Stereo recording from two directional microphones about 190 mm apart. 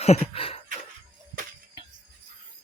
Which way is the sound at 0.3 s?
30° left (ahead or behind).